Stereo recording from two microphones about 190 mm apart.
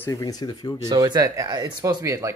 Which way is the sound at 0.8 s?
20° right (ahead or behind).